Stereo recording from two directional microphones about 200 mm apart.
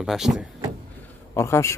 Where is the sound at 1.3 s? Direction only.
15° left (ahead or behind).